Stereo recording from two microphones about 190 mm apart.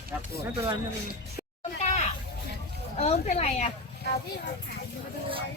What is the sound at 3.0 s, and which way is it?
Speech, 35° left (ahead or behind).